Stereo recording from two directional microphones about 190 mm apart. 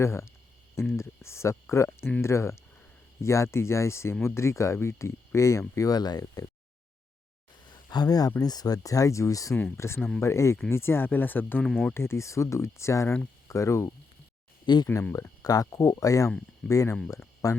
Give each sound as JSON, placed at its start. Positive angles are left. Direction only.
{"t": 0.0, "sound": "speech", "side_deg": 15}
{"t": 7.7, "sound": "speech", "side_deg": 20}
{"t": 11.7, "sound": "speech", "side_deg": 0}
{"t": 11.9, "sound": "speech", "side_deg": 15}